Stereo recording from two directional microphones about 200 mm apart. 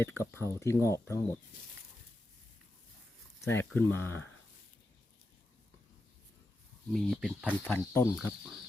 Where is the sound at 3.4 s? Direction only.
10° left (ahead or behind).